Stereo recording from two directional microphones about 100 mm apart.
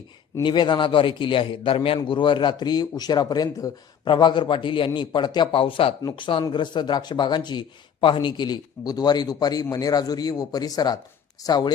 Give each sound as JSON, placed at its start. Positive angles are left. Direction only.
{"t": 0.4, "sound": "a man's voice", "side_deg": 50}
{"t": 2.0, "sound": "speech", "side_deg": 55}
{"t": 4.1, "sound": "a man's voice", "side_deg": 50}